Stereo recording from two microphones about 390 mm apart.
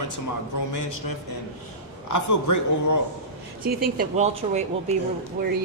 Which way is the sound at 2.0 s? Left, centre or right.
Left.